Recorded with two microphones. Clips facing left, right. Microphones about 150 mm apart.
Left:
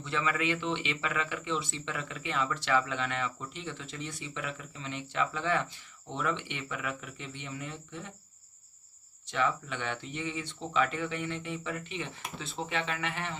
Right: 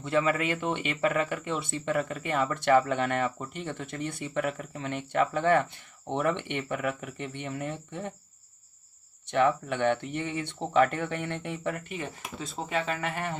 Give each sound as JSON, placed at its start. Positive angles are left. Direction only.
{"t": 0.0, "sound": "speech", "side_deg": -45}
{"t": 9.3, "sound": "speech", "side_deg": -60}